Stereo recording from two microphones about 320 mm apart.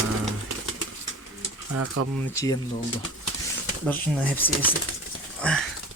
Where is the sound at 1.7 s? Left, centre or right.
Right.